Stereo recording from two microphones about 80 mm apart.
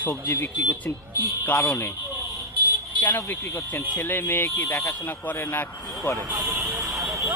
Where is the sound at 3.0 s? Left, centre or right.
Left.